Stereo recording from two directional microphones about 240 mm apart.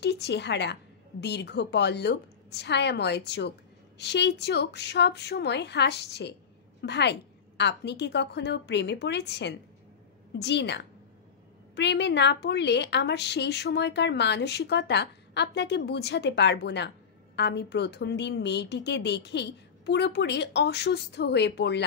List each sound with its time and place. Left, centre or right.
0.0 s a woman's voice: left